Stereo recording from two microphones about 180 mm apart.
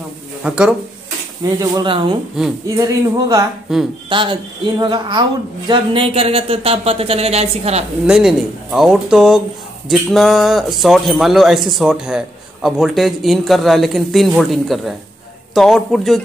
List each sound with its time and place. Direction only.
0.4 s speech: 5° right (ahead or behind)
1.6 s speech: 25° right (ahead or behind)
3.7 s speech: centre (ahead or behind)
4.1 s speech: 25° right (ahead or behind)
8.1 s speech: centre (ahead or behind)